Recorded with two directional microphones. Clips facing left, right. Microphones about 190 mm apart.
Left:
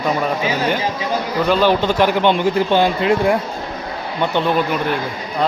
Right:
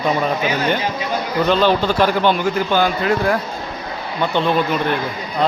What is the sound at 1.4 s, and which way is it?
A man's voice, 10° left (ahead or behind).